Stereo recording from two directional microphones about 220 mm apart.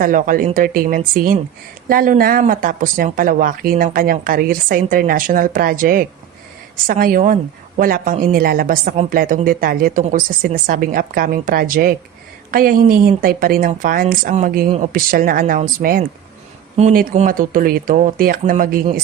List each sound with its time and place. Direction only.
0.0 s speech: 40° right (ahead or behind)